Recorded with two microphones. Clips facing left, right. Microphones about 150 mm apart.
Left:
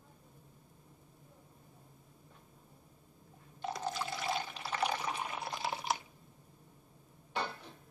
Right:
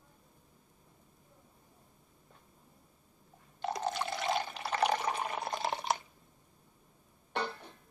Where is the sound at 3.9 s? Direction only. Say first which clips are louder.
Right 3 dB; 65° right (ahead or behind); by 5.9 s 45° right (ahead or behind).